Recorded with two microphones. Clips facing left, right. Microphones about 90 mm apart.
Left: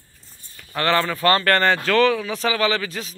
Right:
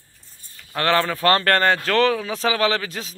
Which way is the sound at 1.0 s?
50° right (ahead or behind).